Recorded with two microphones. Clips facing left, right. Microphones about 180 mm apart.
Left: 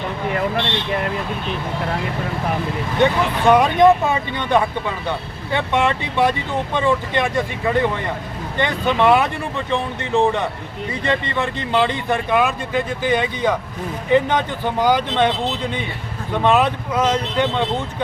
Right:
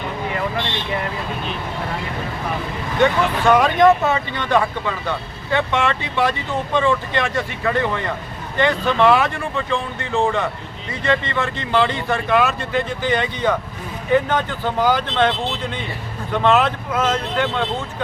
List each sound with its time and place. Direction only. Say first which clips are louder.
3.0 s a man's voice: even; 15° left (ahead or behind)
16.4 s a man's voice: even; 15° left (ahead or behind)